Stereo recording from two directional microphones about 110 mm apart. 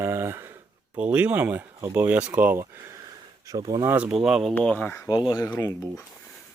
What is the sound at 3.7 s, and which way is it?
Speech, 30° right (ahead or behind).